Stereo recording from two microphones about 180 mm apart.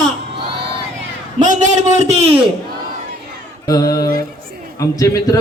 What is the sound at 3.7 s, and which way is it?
A man's voice, 20° left (ahead or behind).